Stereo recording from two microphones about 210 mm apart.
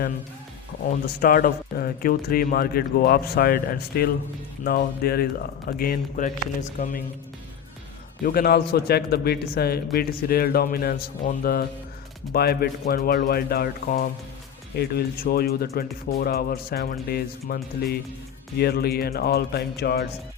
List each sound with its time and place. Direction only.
1.0 s speech: 45° left (ahead or behind)
8.2 s speech: 45° left (ahead or behind)